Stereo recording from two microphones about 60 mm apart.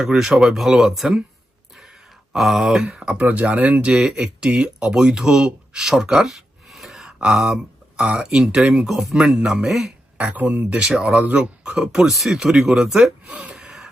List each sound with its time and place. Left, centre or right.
0.0 s speech: centre
2.3 s speech: centre
5.7 s a sound: centre
8.0 s speech: centre
10.2 s speech: right
13.2 s speech: right
13.6 s a sound: centre